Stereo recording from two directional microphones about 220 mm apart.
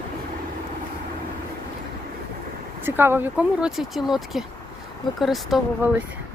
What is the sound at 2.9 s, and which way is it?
Speech, 10° right (ahead or behind).